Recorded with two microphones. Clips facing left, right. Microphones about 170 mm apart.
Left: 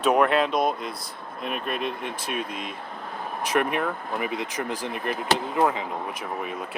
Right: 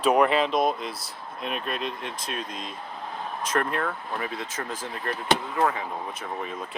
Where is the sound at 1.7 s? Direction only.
55° left (ahead or behind).